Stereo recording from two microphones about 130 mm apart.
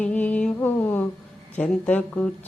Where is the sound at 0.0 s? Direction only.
10° left (ahead or behind).